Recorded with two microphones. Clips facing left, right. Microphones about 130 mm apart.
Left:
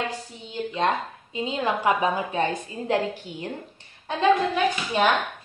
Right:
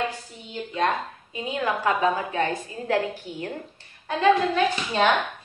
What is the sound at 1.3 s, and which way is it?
A woman's voice, 25° left (ahead or behind).